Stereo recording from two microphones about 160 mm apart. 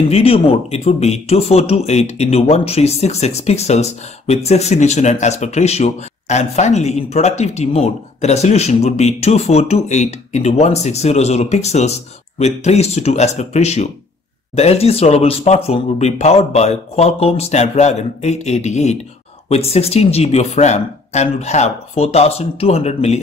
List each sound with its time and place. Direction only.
0.1 s speech: 35° left (ahead or behind)